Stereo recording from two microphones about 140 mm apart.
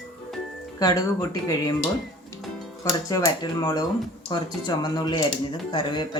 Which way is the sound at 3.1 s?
25° left (ahead or behind).